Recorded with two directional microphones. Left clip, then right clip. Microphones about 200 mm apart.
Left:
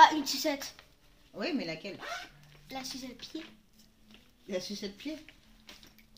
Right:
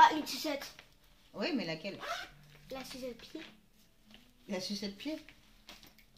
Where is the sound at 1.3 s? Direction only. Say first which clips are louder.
Left 1 dB; 15° right (ahead or behind).